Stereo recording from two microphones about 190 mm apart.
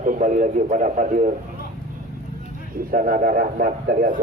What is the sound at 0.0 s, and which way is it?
A man's voice, 40° right (ahead or behind).